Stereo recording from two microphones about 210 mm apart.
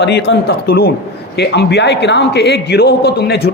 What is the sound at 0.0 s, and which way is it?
Speech, 55° left (ahead or behind).